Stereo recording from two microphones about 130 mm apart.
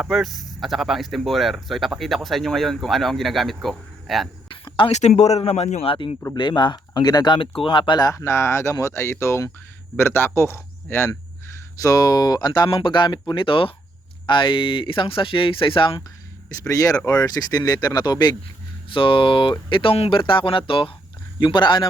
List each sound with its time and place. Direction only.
0.0 s speech: centre (ahead or behind)
4.9 s speech: 60° left (ahead or behind)
6.3 s speech: 35° left (ahead or behind)
8.1 s speech: 20° left (ahead or behind); by 16.0 s 40° left (ahead or behind)
16.6 s speech: 25° left (ahead or behind)